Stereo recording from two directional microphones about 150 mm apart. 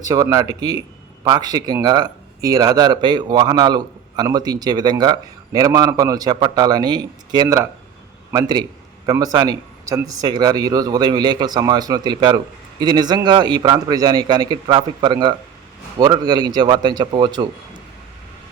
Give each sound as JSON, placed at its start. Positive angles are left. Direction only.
{"t": 0.0, "sound": "speech", "side_deg": -25}
{"t": 7.4, "sound": "speech", "side_deg": -15}